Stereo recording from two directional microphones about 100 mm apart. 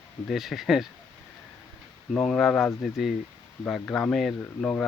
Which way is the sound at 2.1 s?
5° left (ahead or behind).